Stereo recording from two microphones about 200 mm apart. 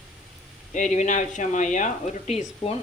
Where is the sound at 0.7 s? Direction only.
35° left (ahead or behind).